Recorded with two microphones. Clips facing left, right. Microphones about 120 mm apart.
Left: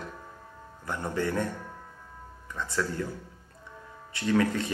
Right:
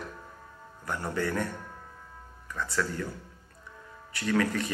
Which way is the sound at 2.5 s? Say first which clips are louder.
Even; 20° left (ahead or behind).